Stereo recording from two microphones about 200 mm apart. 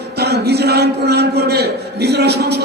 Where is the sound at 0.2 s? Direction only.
55° right (ahead or behind).